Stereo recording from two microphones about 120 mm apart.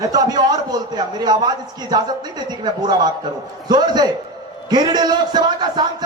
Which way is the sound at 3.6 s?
35° right (ahead or behind).